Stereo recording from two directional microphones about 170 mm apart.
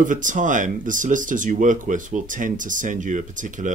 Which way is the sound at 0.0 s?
50° right (ahead or behind).